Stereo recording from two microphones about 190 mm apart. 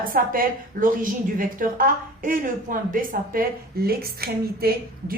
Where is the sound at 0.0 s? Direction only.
45° right (ahead or behind).